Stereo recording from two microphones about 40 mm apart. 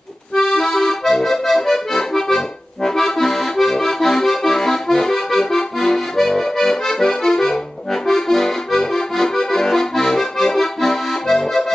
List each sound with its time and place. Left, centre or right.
0.3 s accordion: centre